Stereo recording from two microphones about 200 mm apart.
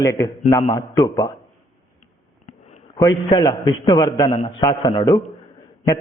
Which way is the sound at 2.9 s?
20° left (ahead or behind).